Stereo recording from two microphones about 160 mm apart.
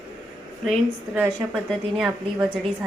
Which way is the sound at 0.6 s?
Centre (ahead or behind).